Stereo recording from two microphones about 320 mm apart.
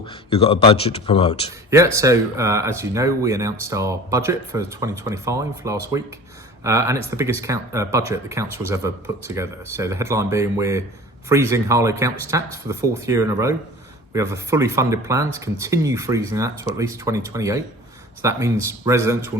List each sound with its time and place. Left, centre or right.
0.0 s speech: centre
1.7 s speech: centre